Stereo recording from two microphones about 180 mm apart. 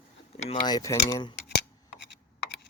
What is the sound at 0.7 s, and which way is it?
Speech, 20° left (ahead or behind).